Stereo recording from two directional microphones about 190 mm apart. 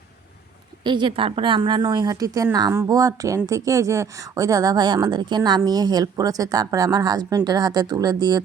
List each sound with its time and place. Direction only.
0.9 s a woman's voice: 25° right (ahead or behind)